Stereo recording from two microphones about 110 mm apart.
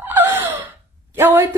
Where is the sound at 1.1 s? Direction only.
20° right (ahead or behind).